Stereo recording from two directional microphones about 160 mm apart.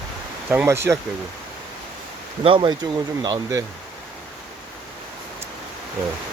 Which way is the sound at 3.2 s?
20° right (ahead or behind).